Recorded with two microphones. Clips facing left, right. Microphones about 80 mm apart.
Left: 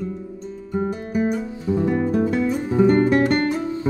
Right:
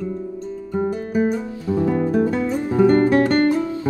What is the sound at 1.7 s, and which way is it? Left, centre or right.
Music, centre.